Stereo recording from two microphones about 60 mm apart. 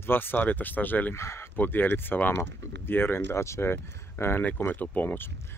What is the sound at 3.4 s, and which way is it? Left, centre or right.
Speech, left.